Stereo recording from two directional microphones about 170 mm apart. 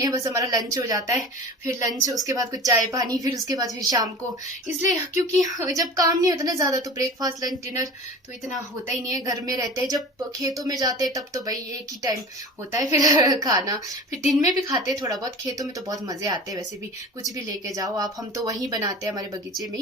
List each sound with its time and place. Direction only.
0.0 s a woman's voice: 20° right (ahead or behind)
9.0 s a woman's voice: 20° right (ahead or behind)
12.7 s a woman's voice: 20° right (ahead or behind)